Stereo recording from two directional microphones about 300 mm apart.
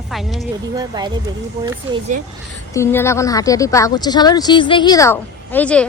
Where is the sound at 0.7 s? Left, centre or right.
Centre.